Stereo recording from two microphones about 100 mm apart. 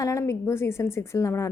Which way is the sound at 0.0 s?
30° left (ahead or behind).